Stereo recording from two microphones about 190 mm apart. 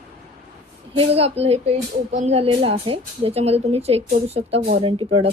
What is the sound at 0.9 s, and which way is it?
Speech, 30° right (ahead or behind).